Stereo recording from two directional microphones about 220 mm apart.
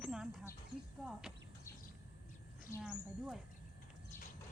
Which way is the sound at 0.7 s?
15° right (ahead or behind).